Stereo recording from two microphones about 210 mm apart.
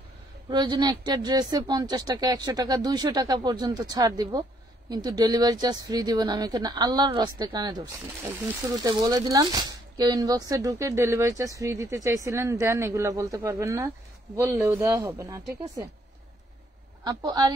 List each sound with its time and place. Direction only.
0.5 s speech: 20° right (ahead or behind)
17.0 s speech: 20° right (ahead or behind)